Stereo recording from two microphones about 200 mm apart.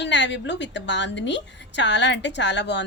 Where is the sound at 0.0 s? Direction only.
60° left (ahead or behind).